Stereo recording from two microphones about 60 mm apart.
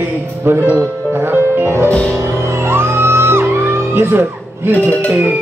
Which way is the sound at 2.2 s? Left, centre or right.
Right.